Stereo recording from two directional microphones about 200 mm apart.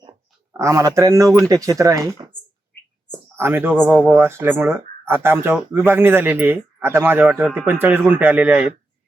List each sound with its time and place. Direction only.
0.5 s speech: 15° right (ahead or behind)
3.3 s speech: 10° right (ahead or behind)